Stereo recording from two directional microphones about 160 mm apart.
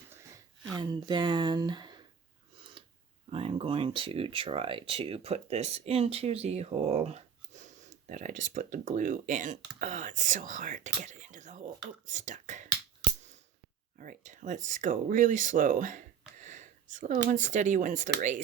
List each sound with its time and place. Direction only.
0.8 s speech: 30° right (ahead or behind)
2.8 s a sound: 35° right (ahead or behind)
3.2 s speech: 35° right (ahead or behind)
14.0 s speech: 55° right (ahead or behind)